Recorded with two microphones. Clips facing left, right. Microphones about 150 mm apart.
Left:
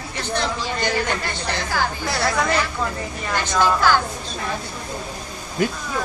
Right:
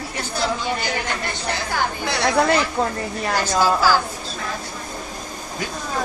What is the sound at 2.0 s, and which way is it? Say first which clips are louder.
Speech: right 1 dB; centre (ahead or behind).